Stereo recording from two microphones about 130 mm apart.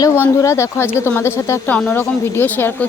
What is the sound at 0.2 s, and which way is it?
Speech, 20° left (ahead or behind).